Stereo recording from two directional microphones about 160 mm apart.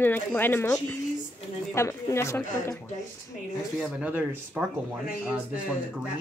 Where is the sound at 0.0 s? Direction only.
10° left (ahead or behind).